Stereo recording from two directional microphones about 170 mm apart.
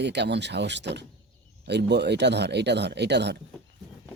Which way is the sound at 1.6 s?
80° right.